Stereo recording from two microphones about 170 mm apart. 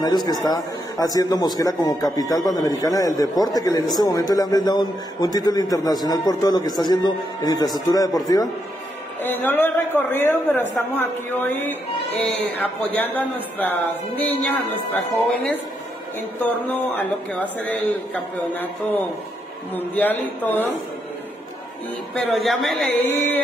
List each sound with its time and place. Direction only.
0.0 s a man's voice: 25° left (ahead or behind)
9.2 s a man's voice: 10° left (ahead or behind)
22.1 s speech: 5° left (ahead or behind)